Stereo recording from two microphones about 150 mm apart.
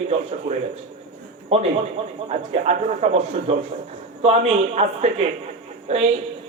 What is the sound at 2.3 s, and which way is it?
A man's voice, 45° right (ahead or behind).